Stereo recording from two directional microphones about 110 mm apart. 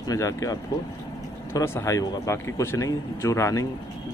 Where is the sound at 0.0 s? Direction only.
30° left (ahead or behind).